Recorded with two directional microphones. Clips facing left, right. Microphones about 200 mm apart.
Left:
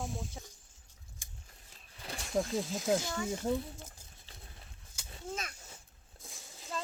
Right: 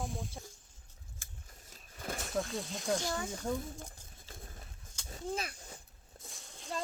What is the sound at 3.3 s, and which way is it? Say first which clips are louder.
Speech: left 7 dB; 25° left (ahead or behind).